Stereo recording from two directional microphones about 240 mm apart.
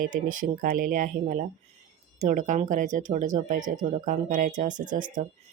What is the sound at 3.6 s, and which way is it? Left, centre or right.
Speech, centre.